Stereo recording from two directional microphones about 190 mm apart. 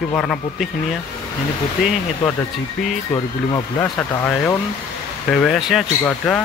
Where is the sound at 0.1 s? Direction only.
5° left (ahead or behind).